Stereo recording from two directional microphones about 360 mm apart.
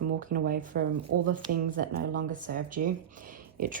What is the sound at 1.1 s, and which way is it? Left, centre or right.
Speech, right.